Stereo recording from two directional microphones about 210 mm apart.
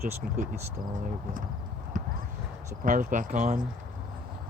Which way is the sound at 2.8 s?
40° right (ahead or behind).